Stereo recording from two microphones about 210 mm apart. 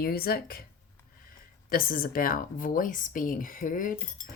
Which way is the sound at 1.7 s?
45° left (ahead or behind).